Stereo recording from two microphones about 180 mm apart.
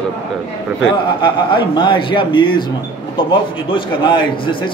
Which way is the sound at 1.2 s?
25° left (ahead or behind).